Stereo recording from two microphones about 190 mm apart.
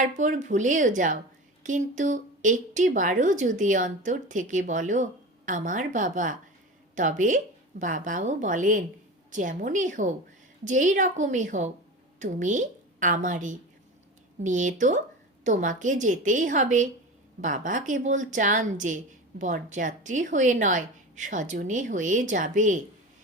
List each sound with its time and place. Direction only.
0.0 s a woman's voice: 40° right (ahead or behind)